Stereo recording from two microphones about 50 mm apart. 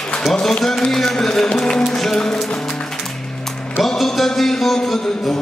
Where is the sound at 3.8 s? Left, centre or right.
Centre.